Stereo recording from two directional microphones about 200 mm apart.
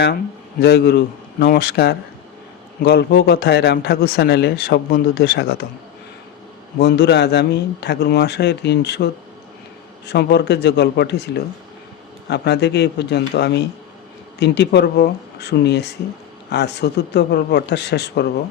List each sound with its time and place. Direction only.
0.6 s speech: 50° left (ahead or behind)
6.7 s a man's voice: 55° left (ahead or behind)
10.1 s a man's voice: 55° left (ahead or behind)